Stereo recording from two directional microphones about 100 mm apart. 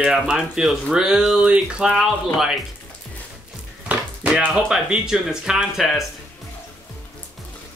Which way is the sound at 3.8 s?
15° right (ahead or behind).